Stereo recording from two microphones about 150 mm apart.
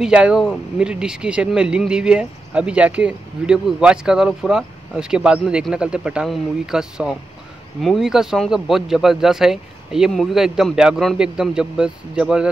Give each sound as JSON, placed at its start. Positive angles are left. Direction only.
{"t": 0.0, "sound": "speech", "side_deg": -5}